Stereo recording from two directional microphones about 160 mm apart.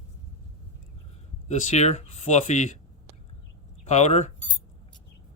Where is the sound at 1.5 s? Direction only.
45° left (ahead or behind).